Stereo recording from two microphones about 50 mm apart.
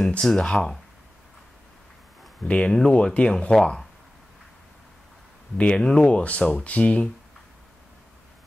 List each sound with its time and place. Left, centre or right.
0.2 s speech: centre
2.4 s speech: left
5.6 s speech: centre